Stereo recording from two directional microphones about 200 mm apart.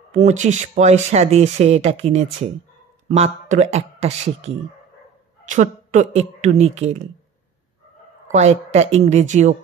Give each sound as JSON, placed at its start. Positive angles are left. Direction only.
{"t": 0.1, "sound": "speech", "side_deg": -35}
{"t": 8.3, "sound": "speech", "side_deg": -35}